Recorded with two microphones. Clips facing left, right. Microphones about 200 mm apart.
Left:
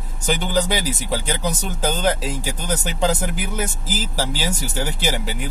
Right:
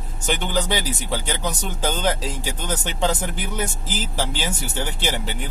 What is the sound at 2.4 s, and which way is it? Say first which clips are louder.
Speech: left 2 dB; 40° left (ahead or behind).